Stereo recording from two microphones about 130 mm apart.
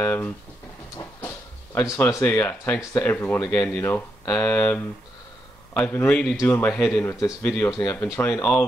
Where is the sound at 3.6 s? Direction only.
15° left (ahead or behind); by 7.6 s centre (ahead or behind).